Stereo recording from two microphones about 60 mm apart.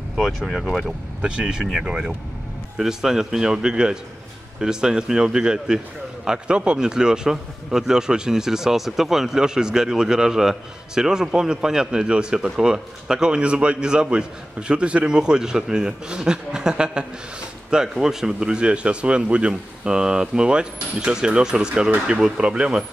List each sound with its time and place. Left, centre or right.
0.1 s speech: centre
1.2 s a man's voice: centre